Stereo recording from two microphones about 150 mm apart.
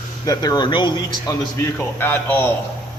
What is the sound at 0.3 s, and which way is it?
A man's voice, 25° left (ahead or behind).